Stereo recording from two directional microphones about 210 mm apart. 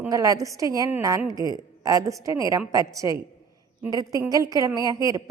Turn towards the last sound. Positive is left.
turn(degrees=-15)  # may be behind; listen again after turning